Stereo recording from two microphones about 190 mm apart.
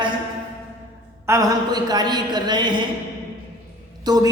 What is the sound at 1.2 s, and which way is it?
Speech, 15° right (ahead or behind).